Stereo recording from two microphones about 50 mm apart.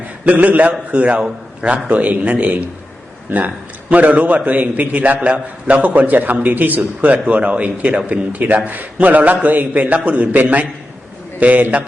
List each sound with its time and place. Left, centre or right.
0.3 s a man's voice: right